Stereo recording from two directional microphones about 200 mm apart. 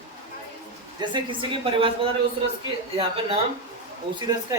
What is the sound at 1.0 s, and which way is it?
A woman's voice, 25° right (ahead or behind).